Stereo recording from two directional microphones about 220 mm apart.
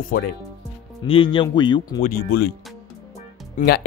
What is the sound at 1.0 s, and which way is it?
Speech, 25° left (ahead or behind).